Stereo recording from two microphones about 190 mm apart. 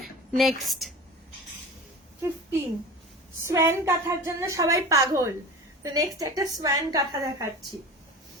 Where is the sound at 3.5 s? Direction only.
15° right (ahead or behind).